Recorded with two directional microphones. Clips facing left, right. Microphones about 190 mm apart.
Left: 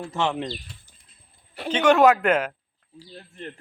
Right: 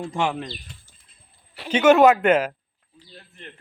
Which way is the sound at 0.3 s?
15° left (ahead or behind).